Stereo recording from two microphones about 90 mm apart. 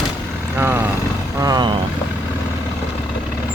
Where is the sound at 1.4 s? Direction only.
50° right (ahead or behind).